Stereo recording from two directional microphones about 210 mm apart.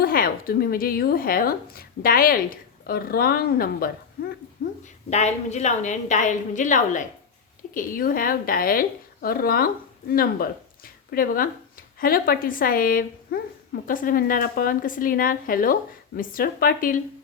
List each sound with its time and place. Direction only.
0.0 s speech: 45° left (ahead or behind)
5.1 s a woman's voice: 30° left (ahead or behind)